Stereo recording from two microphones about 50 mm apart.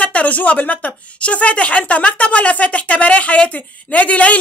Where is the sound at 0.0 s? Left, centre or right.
Left.